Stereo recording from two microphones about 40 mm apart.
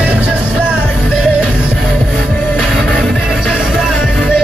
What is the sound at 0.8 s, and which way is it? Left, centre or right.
Music, right.